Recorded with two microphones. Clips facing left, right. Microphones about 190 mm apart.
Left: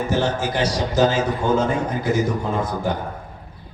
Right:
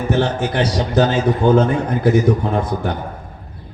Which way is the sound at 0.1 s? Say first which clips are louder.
Right 6 dB; 60° right (ahead or behind).